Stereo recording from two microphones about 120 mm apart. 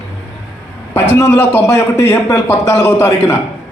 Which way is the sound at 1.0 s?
20° left (ahead or behind).